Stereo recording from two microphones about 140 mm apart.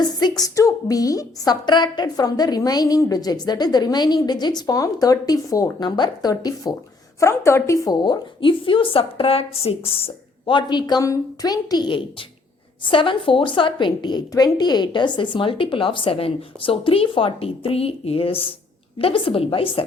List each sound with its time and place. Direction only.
0.2 s a woman's voice: 30° left (ahead or behind)